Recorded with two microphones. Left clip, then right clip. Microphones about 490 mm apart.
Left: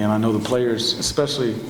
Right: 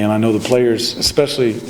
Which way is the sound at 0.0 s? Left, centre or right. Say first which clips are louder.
Right 5 dB; right.